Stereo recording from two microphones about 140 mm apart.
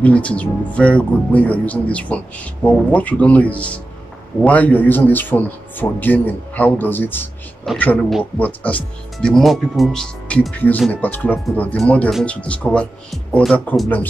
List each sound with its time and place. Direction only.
0.0 s speech: 10° left (ahead or behind)